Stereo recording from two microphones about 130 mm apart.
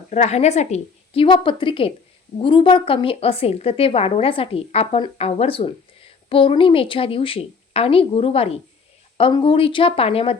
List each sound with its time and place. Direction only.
0.1 s speech: 60° left (ahead or behind)